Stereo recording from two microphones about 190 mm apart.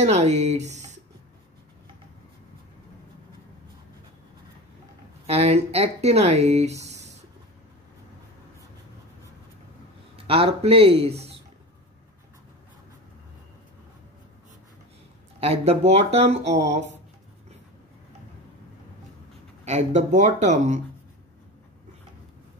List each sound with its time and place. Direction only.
0.0 s speech: 35° right (ahead or behind)
5.2 s speech: 35° right (ahead or behind)
10.1 s speech: 30° right (ahead or behind)
15.4 s speech: 35° right (ahead or behind)
19.6 s speech: 35° right (ahead or behind)